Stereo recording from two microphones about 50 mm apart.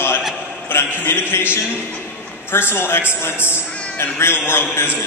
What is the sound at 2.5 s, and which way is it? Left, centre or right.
A man's voice, left.